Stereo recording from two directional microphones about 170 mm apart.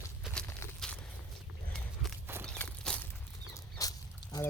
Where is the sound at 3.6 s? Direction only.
20° left (ahead or behind).